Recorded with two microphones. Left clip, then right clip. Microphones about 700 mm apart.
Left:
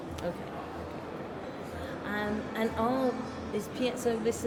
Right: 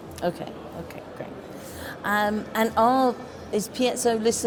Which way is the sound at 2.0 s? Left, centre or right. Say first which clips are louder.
Right 11 dB; right.